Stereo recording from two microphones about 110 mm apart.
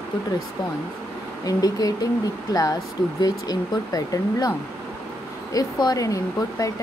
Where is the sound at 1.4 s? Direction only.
35° left (ahead or behind).